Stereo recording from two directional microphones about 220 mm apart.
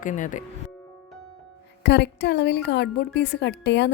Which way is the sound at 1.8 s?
50° left (ahead or behind).